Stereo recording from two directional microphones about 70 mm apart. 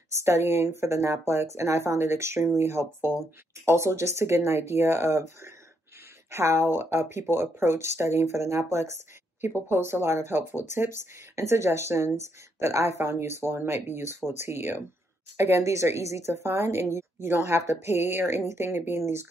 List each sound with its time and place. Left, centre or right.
0.1 s speech: right